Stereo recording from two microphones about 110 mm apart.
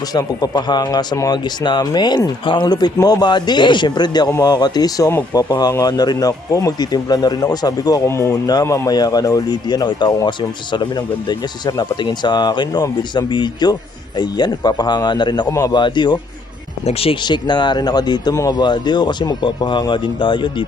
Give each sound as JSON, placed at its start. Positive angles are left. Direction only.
{"t": 0.1, "sound": "speech", "side_deg": 35}
{"t": 16.8, "sound": "speech", "side_deg": 60}
{"t": 17.2, "sound": "speech", "side_deg": 40}